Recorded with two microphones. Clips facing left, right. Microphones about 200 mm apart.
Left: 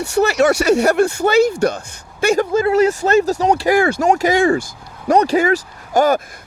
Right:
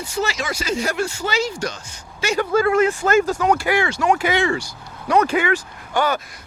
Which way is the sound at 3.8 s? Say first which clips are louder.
Left 5 dB; 50° left (ahead or behind).